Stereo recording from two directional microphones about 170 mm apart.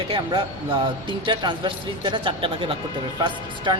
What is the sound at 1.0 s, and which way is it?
Speech, 25° right (ahead or behind).